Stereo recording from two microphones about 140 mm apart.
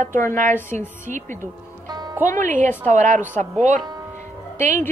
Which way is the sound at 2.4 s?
65° right (ahead or behind).